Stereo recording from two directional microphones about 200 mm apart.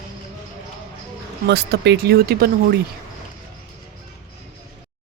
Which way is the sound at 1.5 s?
55° right (ahead or behind).